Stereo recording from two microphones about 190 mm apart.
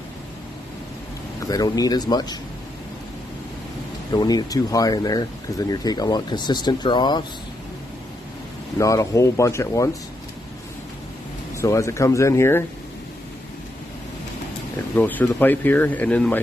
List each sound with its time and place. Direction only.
1.4 s speech: 20° left (ahead or behind)
4.1 s speech: 20° left (ahead or behind)
8.7 s speech: 15° left (ahead or behind)
11.5 s speech: 15° left (ahead or behind)
15.0 s speech: 10° left (ahead or behind)